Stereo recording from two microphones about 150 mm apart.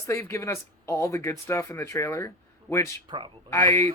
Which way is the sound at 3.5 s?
20° left (ahead or behind).